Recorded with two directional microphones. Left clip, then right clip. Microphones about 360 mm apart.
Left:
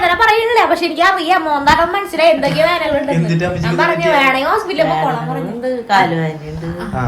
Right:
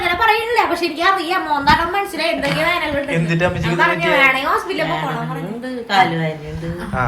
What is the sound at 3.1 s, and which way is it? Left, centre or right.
Speech, centre.